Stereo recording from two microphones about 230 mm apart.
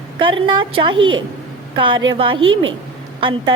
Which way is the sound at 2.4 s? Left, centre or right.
Right.